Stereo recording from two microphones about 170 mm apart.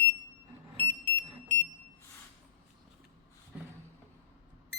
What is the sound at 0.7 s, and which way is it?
Alarm, 30° right (ahead or behind).